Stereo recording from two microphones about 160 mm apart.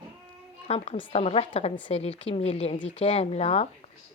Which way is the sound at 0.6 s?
40° left (ahead or behind).